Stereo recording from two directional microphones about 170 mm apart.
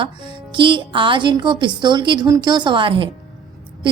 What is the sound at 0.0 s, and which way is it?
A woman's voice, 30° right (ahead or behind).